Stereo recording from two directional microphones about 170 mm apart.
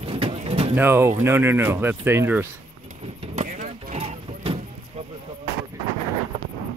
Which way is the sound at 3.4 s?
45° right (ahead or behind).